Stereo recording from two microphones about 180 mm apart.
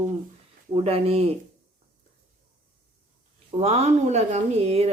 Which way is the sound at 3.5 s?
35° right (ahead or behind).